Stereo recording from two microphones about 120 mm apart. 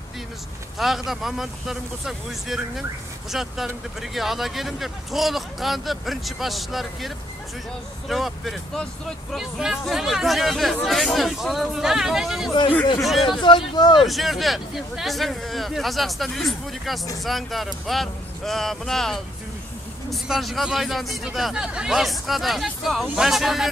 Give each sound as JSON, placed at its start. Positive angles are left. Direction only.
{"t": 0.7, "sound": "speech", "side_deg": 0}
{"t": 8.1, "sound": "speech", "side_deg": 0}
{"t": 13.2, "sound": "speech", "side_deg": 40}
{"t": 14.0, "sound": "speech", "side_deg": 0}